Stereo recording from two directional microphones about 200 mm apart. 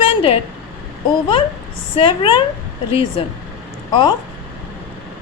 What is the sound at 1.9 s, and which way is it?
Speech, 25° left (ahead or behind).